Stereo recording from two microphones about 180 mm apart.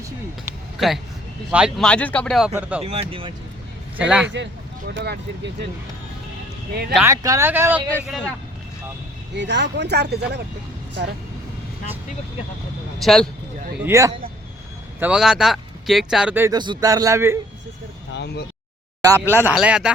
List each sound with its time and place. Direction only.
1.5 s speech: 5° right (ahead or behind)
2.8 s speech: 35° right (ahead or behind)
3.9 s speech: 5° right (ahead or behind)
4.9 s speech: 75° right (ahead or behind)
7.0 s speech: 20° right (ahead or behind)
8.0 s speech: centre (ahead or behind)
9.3 s speech: 80° right; by 10.4 s 65° right (ahead or behind)
13.0 s speech: centre (ahead or behind)
13.8 s speech: 15° right (ahead or behind)
16.6 s a man's voice: 20° right (ahead or behind)
18.1 s speech: 70° left (ahead or behind)
19.0 s speech: 15° right (ahead or behind)